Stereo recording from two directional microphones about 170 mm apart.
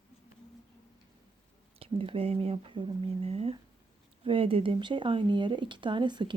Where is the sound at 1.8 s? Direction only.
35° right (ahead or behind).